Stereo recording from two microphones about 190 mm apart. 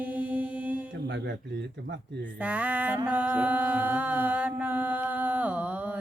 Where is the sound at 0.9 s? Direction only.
65° right (ahead or behind).